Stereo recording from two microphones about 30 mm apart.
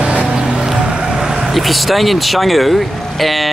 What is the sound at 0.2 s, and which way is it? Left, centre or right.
Music, right.